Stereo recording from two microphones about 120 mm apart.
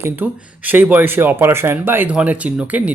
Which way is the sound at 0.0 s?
15° right (ahead or behind).